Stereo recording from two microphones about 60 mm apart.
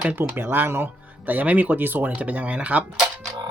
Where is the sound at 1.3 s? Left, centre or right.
Right.